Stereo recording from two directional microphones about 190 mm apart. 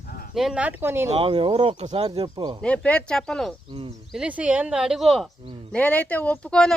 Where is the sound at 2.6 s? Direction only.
5° left (ahead or behind).